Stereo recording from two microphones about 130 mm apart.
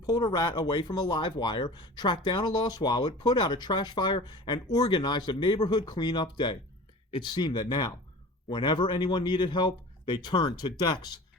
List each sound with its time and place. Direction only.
0.0 s speech: 30° left (ahead or behind)